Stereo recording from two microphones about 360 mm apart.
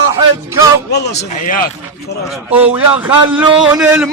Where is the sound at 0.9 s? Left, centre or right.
Left.